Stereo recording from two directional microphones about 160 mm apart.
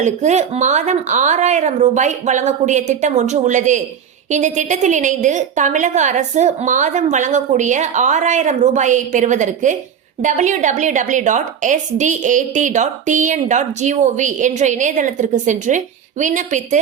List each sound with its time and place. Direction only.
0.0 s a woman's voice: 45° right (ahead or behind)